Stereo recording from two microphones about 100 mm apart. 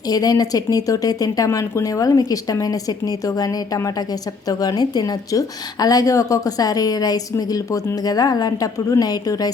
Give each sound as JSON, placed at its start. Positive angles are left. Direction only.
{"t": 0.1, "sound": "a woman's voice", "side_deg": 40}